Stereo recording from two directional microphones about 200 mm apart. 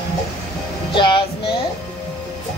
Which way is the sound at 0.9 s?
25° left (ahead or behind).